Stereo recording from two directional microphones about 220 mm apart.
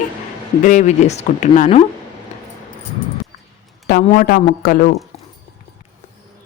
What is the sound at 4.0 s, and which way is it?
Speech, 35° left (ahead or behind).